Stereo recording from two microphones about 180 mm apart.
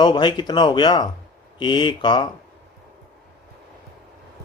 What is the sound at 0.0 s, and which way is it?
Speech, 25° left (ahead or behind).